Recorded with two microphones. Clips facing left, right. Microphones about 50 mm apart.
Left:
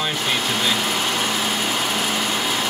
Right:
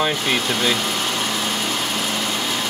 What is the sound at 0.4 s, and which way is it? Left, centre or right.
Light engine, centre.